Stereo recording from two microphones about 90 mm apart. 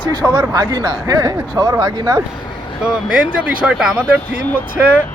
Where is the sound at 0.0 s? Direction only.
55° right (ahead or behind).